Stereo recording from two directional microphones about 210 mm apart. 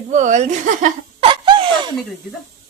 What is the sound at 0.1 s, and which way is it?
Speech, 35° right (ahead or behind).